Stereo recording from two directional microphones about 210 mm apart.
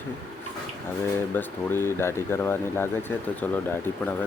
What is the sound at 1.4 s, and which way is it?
Speech, 10° left (ahead or behind).